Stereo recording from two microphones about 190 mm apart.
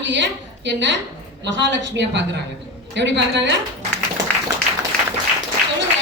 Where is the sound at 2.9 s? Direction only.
65° right (ahead or behind).